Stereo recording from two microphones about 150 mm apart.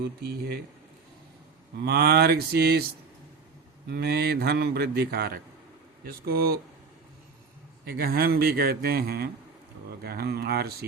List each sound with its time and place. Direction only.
0.0 s a man's voice: 90° right
1.8 s a man's voice: 90° right
3.8 s a man's voice: 90° right
7.9 s a man's voice: 90° right